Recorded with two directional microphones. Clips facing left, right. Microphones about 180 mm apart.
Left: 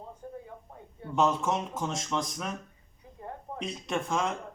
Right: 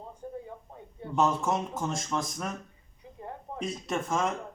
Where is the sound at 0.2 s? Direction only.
25° right (ahead or behind).